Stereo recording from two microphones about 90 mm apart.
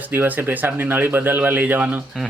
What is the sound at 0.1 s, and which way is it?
A man's voice, 20° right (ahead or behind).